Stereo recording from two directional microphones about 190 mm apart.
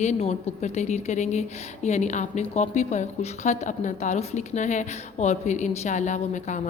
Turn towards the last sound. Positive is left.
turn(degrees=40)  # may be behind; listen again after turning